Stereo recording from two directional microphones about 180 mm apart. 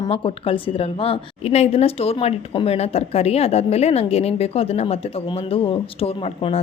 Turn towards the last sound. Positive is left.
turn(degrees=30)  # may be behind; listen again after turning